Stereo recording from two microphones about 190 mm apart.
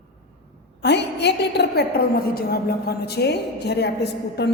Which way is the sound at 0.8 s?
65° left (ahead or behind).